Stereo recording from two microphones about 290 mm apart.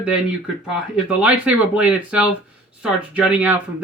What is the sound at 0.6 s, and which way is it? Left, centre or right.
Speech, centre.